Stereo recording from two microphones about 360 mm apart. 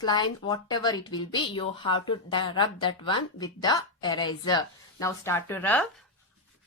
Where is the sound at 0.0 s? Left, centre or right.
Centre.